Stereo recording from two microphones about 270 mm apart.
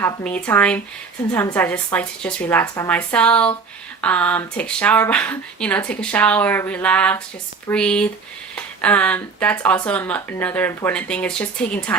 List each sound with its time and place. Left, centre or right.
0.0 s speech: centre